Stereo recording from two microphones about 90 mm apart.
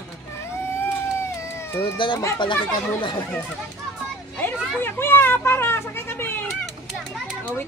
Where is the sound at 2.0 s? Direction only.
65° left (ahead or behind).